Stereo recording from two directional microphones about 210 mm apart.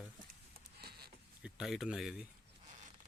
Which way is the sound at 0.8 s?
50° right (ahead or behind).